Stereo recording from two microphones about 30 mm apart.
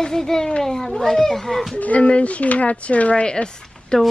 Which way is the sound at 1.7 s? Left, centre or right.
Left.